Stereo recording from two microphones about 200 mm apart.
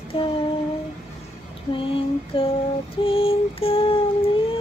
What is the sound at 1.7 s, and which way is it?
Female singing, 25° left (ahead or behind).